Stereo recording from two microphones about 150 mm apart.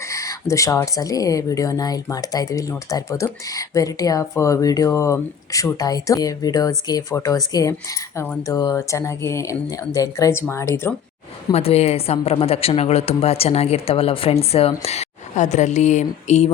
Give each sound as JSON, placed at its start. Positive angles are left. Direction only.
{"t": 0.1, "sound": "speech", "side_deg": 20}
{"t": 11.5, "sound": "a woman's voice", "side_deg": 45}